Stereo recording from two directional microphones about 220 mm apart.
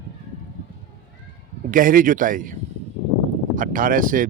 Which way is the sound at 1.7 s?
40° right (ahead or behind).